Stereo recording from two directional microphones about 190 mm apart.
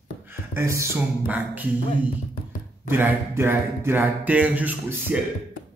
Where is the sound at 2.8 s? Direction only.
10° right (ahead or behind).